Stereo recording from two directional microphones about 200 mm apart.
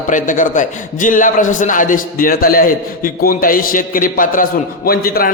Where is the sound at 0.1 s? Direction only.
40° left (ahead or behind).